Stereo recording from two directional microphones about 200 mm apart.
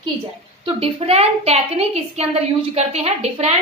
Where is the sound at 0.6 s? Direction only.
30° right (ahead or behind).